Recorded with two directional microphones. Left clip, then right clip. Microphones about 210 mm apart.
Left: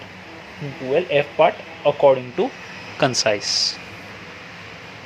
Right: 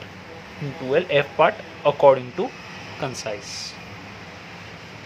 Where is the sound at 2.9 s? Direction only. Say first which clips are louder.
Left 11 dB; 20° left (ahead or behind).